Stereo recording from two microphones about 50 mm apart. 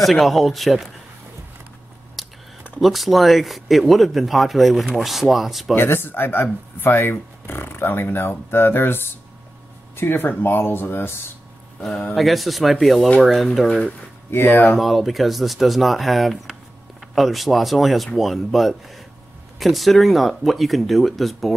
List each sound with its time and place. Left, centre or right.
0.0 s speech: centre
2.2 s a sound: centre
2.8 s speech: centre
5.8 s speech: left
11.8 s speech: centre
12.2 s speech: centre
14.3 s speech: left
14.8 s speech: centre